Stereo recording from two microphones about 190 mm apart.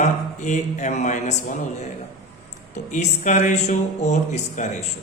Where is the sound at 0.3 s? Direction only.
40° left (ahead or behind).